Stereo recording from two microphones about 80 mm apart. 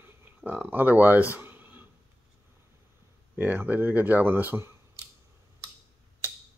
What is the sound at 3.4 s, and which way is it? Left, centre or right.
Speech, right.